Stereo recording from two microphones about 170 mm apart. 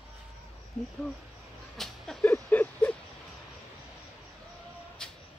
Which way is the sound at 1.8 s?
5° left (ahead or behind).